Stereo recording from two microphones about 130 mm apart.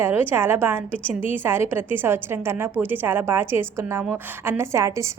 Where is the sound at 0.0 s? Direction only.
15° right (ahead or behind).